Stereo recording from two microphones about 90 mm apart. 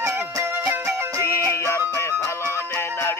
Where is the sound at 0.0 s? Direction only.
30° right (ahead or behind).